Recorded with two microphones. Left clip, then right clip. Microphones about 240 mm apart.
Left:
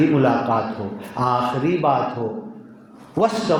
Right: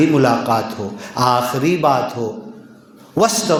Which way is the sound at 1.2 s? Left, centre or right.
Right.